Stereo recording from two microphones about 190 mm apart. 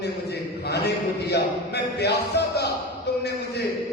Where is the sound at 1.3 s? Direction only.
60° left (ahead or behind).